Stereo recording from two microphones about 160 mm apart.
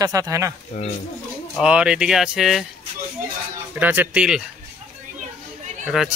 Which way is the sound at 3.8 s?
10° right (ahead or behind).